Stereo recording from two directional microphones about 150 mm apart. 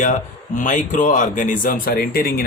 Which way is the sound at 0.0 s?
55° left (ahead or behind).